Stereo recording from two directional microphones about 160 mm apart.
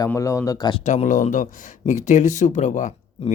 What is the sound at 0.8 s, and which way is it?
Speech, 50° left (ahead or behind).